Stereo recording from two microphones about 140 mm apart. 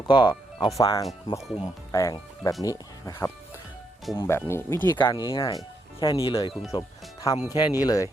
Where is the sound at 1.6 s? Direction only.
25° left (ahead or behind).